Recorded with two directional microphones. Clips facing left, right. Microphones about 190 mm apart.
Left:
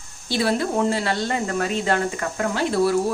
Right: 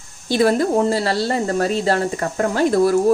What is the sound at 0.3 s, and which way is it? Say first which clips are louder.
Speech: right 6 dB; 45° right (ahead or behind).